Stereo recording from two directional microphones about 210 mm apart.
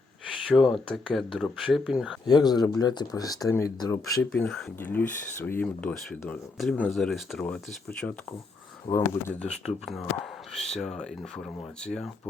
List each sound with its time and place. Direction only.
0.4 s speech: centre (ahead or behind)
2.2 s speech: 20° left (ahead or behind)
4.1 s speech: 5° left (ahead or behind)